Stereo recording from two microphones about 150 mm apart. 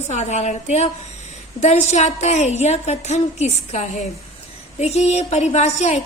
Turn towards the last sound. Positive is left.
turn(degrees=50)  # may be behind; listen again after turning